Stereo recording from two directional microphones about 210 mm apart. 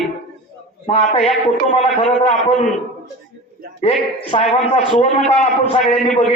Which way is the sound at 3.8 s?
25° left (ahead or behind).